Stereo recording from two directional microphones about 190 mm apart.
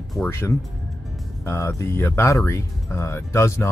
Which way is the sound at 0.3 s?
15° left (ahead or behind).